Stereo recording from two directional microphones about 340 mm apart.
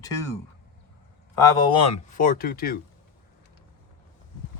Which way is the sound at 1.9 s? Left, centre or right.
Left.